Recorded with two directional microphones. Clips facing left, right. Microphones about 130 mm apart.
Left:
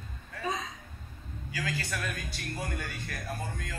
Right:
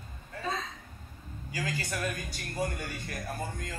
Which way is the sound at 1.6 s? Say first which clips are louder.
Right 1 dB; 20° right (ahead or behind).